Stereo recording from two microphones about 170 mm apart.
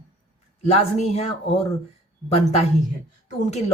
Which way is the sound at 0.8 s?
40° left (ahead or behind).